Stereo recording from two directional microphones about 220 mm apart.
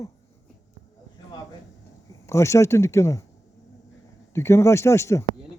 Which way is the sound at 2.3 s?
15° left (ahead or behind).